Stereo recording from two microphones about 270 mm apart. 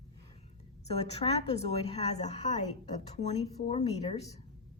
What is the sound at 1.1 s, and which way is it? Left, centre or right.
Speech, left.